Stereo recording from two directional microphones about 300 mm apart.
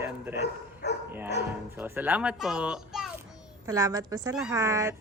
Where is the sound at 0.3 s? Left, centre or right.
Left.